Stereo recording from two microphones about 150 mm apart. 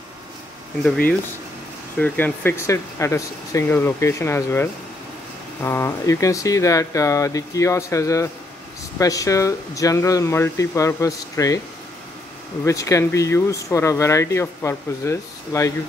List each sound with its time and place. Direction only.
0.8 s speech: 5° left (ahead or behind); by 11.6 s 25° left (ahead or behind)
12.6 s speech: 20° left (ahead or behind)